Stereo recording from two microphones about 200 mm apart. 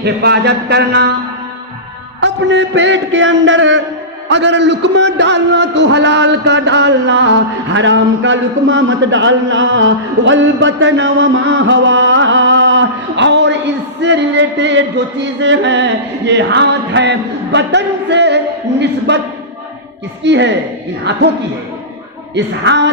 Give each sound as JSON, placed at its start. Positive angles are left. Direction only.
{"t": 0.0, "sound": "a man's voice", "side_deg": -55}
{"t": 2.2, "sound": "a man's voice", "side_deg": -65}
{"t": 15.4, "sound": "a sound", "side_deg": -65}
{"t": 20.2, "sound": "a man's voice", "side_deg": -60}